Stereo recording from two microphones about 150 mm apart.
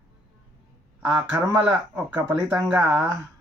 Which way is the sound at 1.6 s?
10° right (ahead or behind).